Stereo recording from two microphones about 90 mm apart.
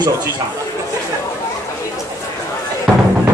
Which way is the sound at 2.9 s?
5° right (ahead or behind).